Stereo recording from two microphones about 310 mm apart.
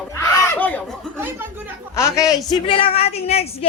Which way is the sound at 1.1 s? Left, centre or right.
Centre.